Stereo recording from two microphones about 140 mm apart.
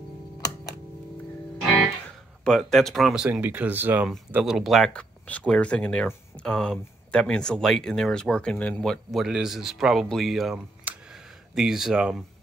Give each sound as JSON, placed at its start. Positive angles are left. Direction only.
{"t": 2.4, "sound": "speech", "side_deg": 5}
{"t": 3.3, "sound": "speech", "side_deg": -10}
{"t": 10.9, "sound": "a sound", "side_deg": -10}
{"t": 11.5, "sound": "speech", "side_deg": -5}